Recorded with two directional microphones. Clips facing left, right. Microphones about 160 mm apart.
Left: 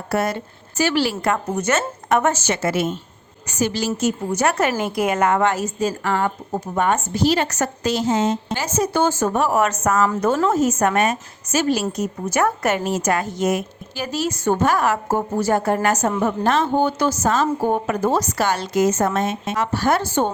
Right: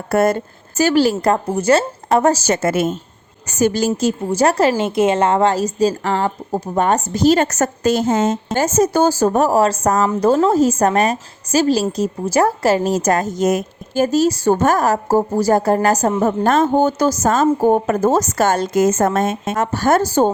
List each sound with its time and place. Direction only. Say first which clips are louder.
0.1 s a woman's voice: right 7 dB; 50° right (ahead or behind)
4.0 s a woman's voice: right 3 dB; 30° right (ahead or behind)
16.2 s a woman's voice: right 5 dB; 45° right (ahead or behind)